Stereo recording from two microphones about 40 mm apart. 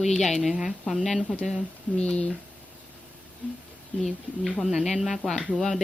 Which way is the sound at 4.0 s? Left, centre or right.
Centre.